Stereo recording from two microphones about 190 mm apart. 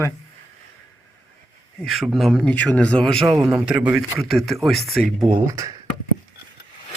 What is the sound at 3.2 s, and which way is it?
Speech, 15° right (ahead or behind).